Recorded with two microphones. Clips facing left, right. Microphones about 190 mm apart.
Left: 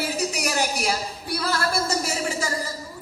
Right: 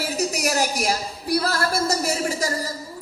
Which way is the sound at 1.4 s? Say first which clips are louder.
Right 2 dB; 40° right (ahead or behind).